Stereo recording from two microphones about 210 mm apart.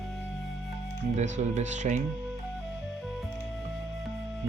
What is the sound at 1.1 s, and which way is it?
Speech, 35° right (ahead or behind).